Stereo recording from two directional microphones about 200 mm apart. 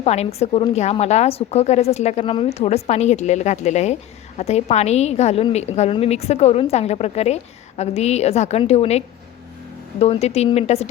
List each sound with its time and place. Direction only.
0.0 s a woman's voice: 30° left (ahead or behind)